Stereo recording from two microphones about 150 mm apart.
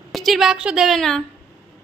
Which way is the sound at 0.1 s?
Centre (ahead or behind).